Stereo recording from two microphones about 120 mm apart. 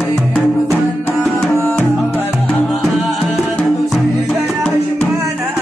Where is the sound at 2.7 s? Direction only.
Centre (ahead or behind).